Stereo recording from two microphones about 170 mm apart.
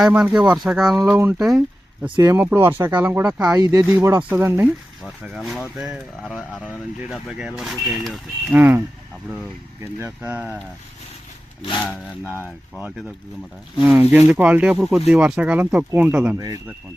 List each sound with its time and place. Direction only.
0.0 s speech: 5° right (ahead or behind)
2.0 s speech: 25° right (ahead or behind)
2.3 s speech: 10° right (ahead or behind)
3.5 s speech: 20° right (ahead or behind); by 8.5 s centre (ahead or behind)
8.5 s speech: 10° right (ahead or behind)
10.0 s speech: 10° right (ahead or behind)
11.9 s speech: 10° left (ahead or behind)
13.8 s speech: 10° right (ahead or behind)
16.4 s speech: 20° right (ahead or behind)